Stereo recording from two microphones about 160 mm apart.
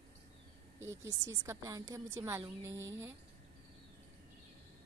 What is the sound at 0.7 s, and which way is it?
A woman's voice, 20° right (ahead or behind).